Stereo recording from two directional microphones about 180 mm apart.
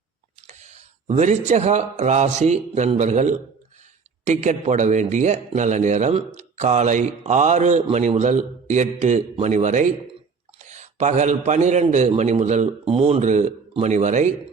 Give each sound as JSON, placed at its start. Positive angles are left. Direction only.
{"t": 0.4, "sound": "a man's voice", "side_deg": -40}